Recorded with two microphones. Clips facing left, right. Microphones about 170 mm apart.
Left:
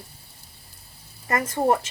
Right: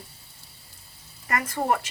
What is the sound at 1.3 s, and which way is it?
Speech, 25° left (ahead or behind).